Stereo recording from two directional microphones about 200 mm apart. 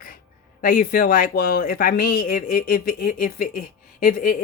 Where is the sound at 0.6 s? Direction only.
45° left (ahead or behind).